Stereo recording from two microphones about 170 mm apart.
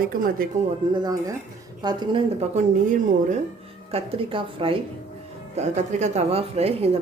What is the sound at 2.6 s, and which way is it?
Speech, 40° right (ahead or behind).